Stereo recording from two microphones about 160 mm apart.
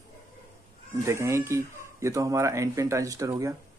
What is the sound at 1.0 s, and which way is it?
Speech, 15° right (ahead or behind).